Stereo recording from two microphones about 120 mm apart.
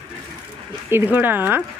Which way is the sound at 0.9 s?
15° right (ahead or behind).